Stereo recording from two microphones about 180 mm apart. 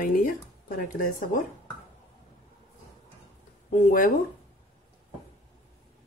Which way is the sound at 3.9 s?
50° left (ahead or behind).